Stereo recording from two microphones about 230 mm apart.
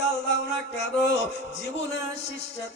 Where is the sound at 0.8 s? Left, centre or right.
Left.